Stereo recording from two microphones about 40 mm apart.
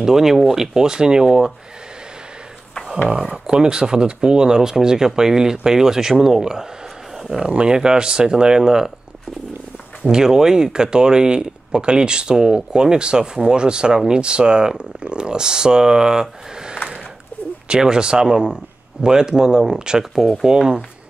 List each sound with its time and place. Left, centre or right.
0.0 s speech: centre
0.7 s speech: centre
3.4 s speech: centre
10.0 s speech: centre